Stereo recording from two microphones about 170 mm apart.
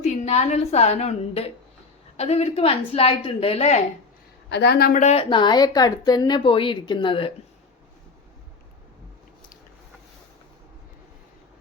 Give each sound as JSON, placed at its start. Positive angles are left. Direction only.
{"t": 0.0, "sound": "a woman's voice", "side_deg": 40}
{"t": 4.4, "sound": "a woman's voice", "side_deg": 85}
{"t": 4.9, "sound": "a woman's voice", "side_deg": 40}
{"t": 5.3, "sound": "a woman's voice", "side_deg": 25}